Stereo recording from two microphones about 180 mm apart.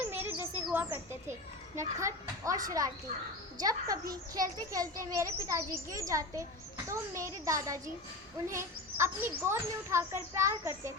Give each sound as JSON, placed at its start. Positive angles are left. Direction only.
{"t": 0.0, "sound": "a child's voice", "side_deg": -10}